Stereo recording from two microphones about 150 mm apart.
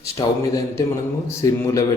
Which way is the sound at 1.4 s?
20° left (ahead or behind).